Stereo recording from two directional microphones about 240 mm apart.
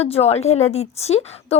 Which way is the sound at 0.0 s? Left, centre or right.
Left.